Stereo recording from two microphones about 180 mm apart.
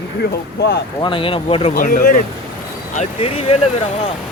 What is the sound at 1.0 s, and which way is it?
Speech, 30° left (ahead or behind).